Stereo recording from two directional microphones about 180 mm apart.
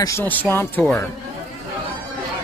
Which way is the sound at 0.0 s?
15° left (ahead or behind).